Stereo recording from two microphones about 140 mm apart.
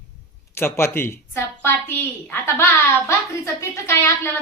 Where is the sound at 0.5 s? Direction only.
15° left (ahead or behind).